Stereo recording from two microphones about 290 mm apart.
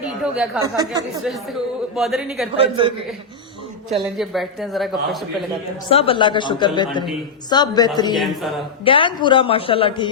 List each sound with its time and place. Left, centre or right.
0.0 s speech: centre
0.6 s speech: centre
2.0 s speech: centre
2.6 s speech: centre
4.0 s speech: centre
5.9 s speech: centre
8.1 s speech: centre
8.8 s a woman's voice: centre